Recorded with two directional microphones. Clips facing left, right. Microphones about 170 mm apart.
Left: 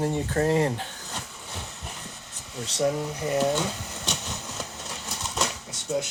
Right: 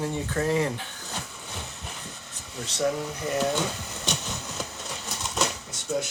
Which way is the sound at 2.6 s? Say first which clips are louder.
Left 2 dB; 35° left (ahead or behind).